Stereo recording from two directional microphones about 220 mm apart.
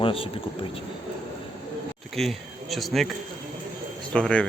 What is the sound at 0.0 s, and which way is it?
Speech, 25° left (ahead or behind).